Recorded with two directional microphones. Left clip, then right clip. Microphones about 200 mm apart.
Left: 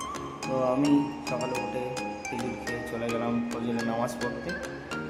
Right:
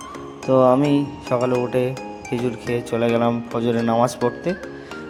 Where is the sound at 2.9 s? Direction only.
45° right (ahead or behind).